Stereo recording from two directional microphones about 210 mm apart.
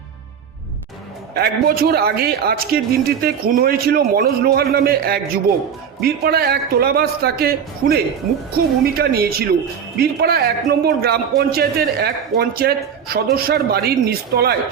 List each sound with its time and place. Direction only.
1.3 s a man's voice: 45° right (ahead or behind)